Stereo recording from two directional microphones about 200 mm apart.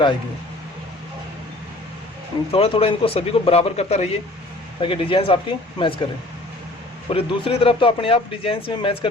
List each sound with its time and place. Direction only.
2.5 s speech: 30° left (ahead or behind)
7.1 s speech: 30° left (ahead or behind)